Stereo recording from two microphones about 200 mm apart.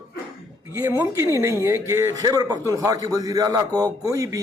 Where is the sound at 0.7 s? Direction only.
15° right (ahead or behind).